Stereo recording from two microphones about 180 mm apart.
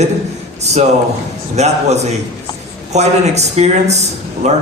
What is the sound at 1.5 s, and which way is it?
A man's voice, 40° right (ahead or behind).